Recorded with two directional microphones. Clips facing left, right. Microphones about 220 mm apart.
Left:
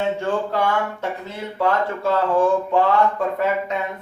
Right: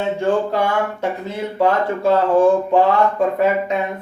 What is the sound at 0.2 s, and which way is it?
Speech, 15° right (ahead or behind).